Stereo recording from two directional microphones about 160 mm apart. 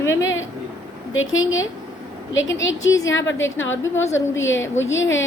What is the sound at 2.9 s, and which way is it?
A woman's voice, 20° left (ahead or behind).